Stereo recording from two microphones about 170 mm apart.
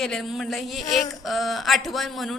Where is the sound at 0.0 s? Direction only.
Centre (ahead or behind).